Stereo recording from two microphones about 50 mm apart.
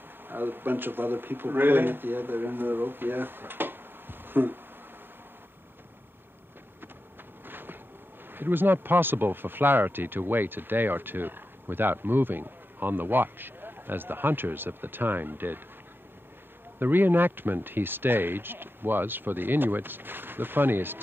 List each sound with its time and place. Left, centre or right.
0.3 s speech: right
7.4 s a sound: right
8.3 s speech: right
16.8 s speech: right